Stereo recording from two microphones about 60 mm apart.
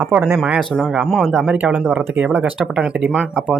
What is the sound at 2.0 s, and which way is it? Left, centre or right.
Speech, right.